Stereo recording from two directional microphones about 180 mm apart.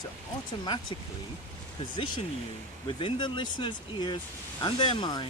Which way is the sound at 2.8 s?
25° left (ahead or behind).